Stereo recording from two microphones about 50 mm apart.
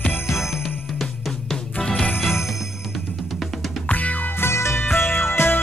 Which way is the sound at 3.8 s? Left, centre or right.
Left.